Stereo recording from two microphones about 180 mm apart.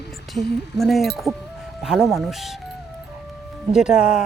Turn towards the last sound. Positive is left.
turn(degrees=-5)  # may be behind; listen again after turning